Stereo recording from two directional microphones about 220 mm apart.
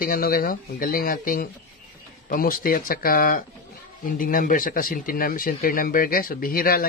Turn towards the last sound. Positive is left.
turn(degrees=40)  # may be behind; listen again after turning